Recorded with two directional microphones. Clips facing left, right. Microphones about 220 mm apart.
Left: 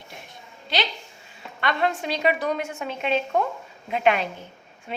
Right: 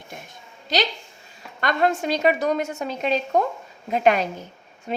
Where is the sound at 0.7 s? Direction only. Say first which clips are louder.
Right 4 dB; 40° right (ahead or behind).